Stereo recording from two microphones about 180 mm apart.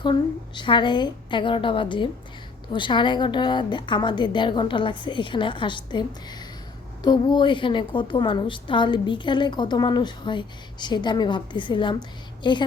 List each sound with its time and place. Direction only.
0.0 s a woman's voice: 25° left (ahead or behind)